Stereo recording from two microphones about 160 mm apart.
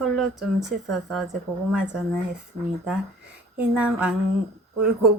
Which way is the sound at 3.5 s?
5° right (ahead or behind).